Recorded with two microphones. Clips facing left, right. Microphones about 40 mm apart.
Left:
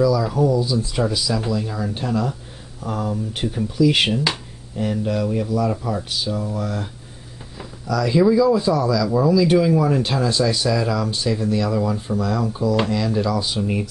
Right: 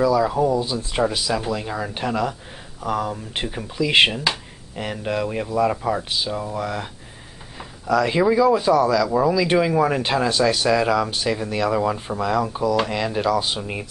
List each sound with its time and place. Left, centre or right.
0.0 s speech: right
3.3 s speech: right
13.6 s speech: centre